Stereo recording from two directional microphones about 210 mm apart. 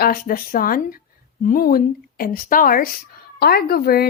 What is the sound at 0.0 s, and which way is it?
Speech, 45° left (ahead or behind).